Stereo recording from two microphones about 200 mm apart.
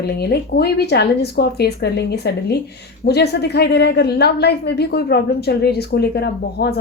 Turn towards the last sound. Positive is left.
turn(degrees=55)  # may be behind; listen again after turning